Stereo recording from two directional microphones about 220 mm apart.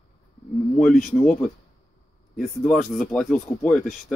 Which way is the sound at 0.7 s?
5° left (ahead or behind).